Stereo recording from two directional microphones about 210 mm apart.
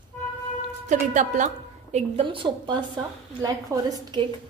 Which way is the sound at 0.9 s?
35° right (ahead or behind).